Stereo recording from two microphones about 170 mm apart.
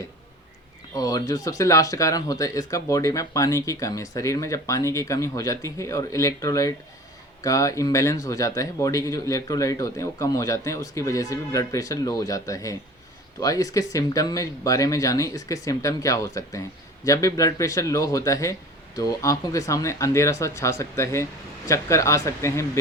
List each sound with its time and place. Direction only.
0.9 s speech: 20° left (ahead or behind)